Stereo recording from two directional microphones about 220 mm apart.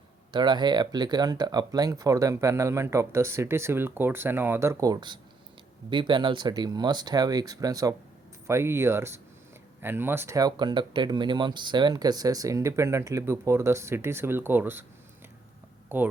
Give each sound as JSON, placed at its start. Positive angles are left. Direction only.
{"t": 0.3, "sound": "speech", "side_deg": -20}
{"t": 15.9, "sound": "speech", "side_deg": -10}